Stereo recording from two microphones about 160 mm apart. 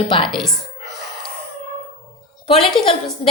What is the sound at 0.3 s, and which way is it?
Speech, centre (ahead or behind).